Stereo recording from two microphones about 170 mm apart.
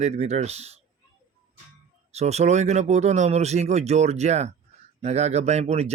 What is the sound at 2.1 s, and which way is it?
Speech, 40° right (ahead or behind).